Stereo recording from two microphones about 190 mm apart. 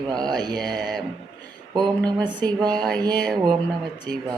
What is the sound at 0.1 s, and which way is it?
Speech, 20° right (ahead or behind).